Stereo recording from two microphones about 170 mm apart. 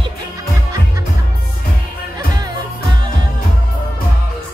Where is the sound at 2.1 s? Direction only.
25° right (ahead or behind).